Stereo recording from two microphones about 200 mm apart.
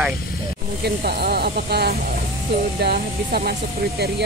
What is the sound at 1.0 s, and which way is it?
Speech, 50° right (ahead or behind).